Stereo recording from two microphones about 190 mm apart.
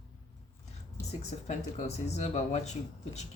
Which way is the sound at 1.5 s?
35° left (ahead or behind).